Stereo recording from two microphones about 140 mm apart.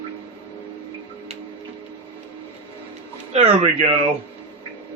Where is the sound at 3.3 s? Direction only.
55° right (ahead or behind).